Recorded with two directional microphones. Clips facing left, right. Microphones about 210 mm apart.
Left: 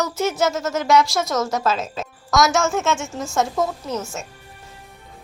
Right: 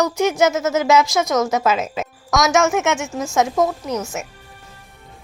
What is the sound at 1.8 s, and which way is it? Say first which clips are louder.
Speech: right 4 dB; 15° right (ahead or behind).